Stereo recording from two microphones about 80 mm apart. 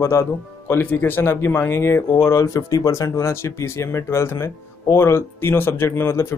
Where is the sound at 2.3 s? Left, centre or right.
Left.